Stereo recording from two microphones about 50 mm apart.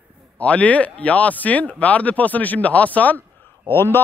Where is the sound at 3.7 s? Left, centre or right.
Left.